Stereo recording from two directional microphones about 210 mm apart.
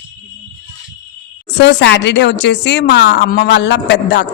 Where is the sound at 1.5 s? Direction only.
55° left (ahead or behind).